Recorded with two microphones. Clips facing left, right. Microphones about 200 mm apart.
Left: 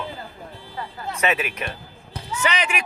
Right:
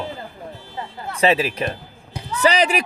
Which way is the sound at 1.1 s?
30° right (ahead or behind).